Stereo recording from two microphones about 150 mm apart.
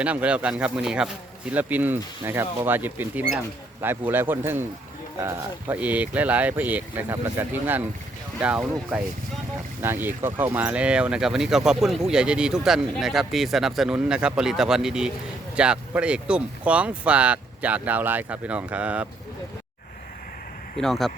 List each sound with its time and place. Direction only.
0.0 s speech: 10° right (ahead or behind)
20.7 s speech: centre (ahead or behind)